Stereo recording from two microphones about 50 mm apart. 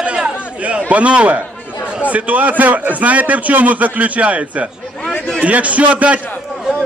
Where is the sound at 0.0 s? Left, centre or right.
Right.